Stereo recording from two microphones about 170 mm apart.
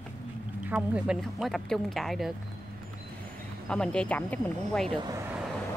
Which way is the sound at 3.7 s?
5° left (ahead or behind).